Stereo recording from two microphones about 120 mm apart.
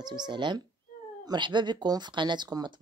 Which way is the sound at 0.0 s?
40° right (ahead or behind).